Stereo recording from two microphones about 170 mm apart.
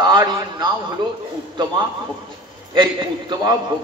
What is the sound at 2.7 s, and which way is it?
Speech, 30° right (ahead or behind).